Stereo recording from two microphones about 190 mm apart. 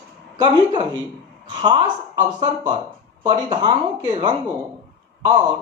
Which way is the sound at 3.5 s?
25° right (ahead or behind).